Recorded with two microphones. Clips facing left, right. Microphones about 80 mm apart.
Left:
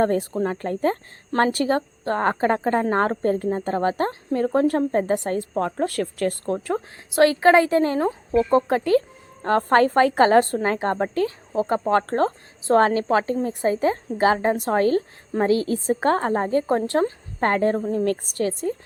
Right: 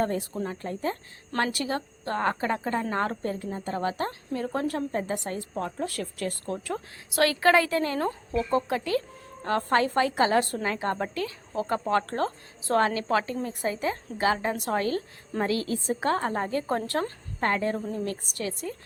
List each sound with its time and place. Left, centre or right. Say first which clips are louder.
0.0 s speech: left 7 dB; left
1.4 s a woman's voice: left 8 dB; left
6.4 s a woman's voice: left 7 dB; left
17.4 s a woman's voice: left 6 dB; left
17.9 s speech: left 9 dB; left
18.3 s a woman's voice: left 9 dB; left